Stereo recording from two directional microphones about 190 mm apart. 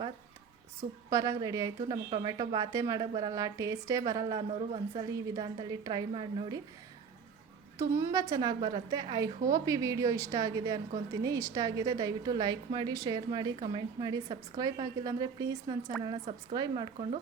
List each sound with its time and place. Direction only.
1.1 s a woman's voice: 20° right (ahead or behind)
7.8 s a woman's voice: 15° right (ahead or behind)